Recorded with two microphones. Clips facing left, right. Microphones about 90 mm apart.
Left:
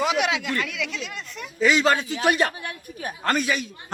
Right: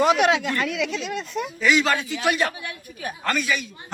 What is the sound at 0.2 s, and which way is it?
Speech, 35° right (ahead or behind).